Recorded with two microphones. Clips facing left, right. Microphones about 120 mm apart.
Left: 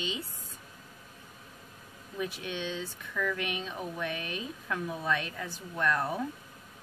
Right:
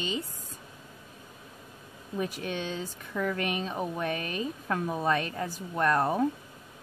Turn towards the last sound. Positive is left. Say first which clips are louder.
# right 5 dB
turn(degrees=-45)  # may be behind; listen again after turning